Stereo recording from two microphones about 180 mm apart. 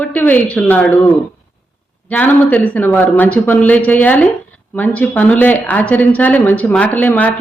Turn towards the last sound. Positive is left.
turn(degrees=10)  # may be behind; listen again after turning